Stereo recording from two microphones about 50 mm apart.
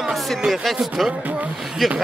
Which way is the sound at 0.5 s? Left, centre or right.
Centre.